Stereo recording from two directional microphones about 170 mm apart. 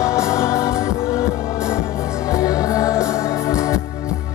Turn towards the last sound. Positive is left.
turn(degrees=15)  # may be behind; listen again after turning